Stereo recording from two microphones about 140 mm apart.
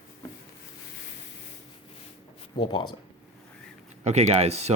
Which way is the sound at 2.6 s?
30° left (ahead or behind).